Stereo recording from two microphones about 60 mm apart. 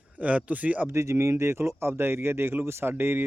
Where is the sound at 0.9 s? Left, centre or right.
Right.